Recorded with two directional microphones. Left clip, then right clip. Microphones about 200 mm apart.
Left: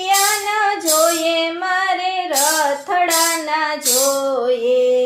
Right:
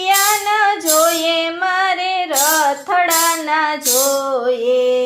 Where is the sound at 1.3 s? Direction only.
15° right (ahead or behind).